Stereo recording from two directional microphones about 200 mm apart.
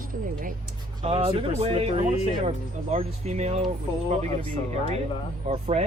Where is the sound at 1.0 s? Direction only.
30° right (ahead or behind).